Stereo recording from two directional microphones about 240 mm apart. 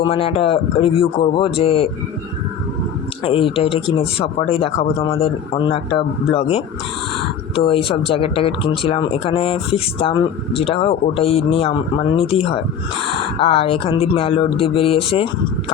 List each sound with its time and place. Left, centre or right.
0.0 s speech: left
3.2 s speech: left